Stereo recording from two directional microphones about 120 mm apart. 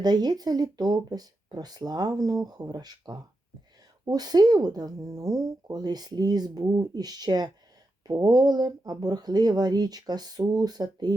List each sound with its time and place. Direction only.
0.0 s a woman's voice: 35° right (ahead or behind)